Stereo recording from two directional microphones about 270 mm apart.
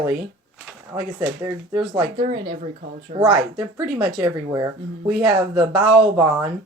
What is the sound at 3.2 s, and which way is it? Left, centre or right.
Speech, centre.